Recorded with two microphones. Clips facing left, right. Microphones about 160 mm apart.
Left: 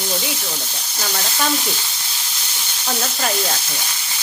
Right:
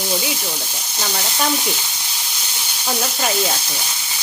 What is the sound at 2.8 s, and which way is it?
Speech, 10° right (ahead or behind).